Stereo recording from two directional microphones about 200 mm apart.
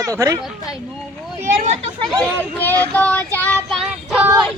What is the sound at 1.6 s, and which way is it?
Speech, 35° right (ahead or behind).